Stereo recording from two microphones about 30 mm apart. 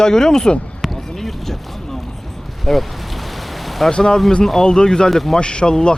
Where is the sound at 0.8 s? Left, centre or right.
Centre.